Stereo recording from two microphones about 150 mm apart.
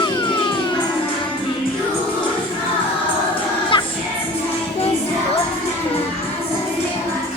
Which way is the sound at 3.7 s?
35° left (ahead or behind).